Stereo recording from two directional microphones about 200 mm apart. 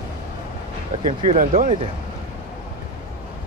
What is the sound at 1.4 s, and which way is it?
Speech, 40° right (ahead or behind).